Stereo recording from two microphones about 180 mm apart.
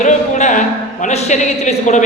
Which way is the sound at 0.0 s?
40° left (ahead or behind).